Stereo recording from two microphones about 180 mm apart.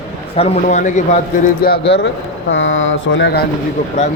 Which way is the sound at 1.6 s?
70° left (ahead or behind).